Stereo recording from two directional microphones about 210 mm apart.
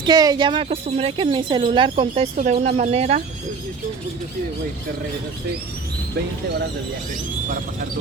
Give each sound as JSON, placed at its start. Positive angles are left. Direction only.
{"t": 0.0, "sound": "a woman's voice", "side_deg": -20}
{"t": 2.3, "sound": "speech", "side_deg": -40}